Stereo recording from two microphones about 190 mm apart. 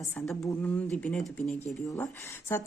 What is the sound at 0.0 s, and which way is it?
A woman's voice, 15° left (ahead or behind).